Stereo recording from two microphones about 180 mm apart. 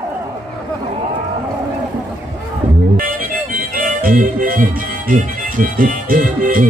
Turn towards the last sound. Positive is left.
turn(degrees=-50)  # may be behind; listen again after turning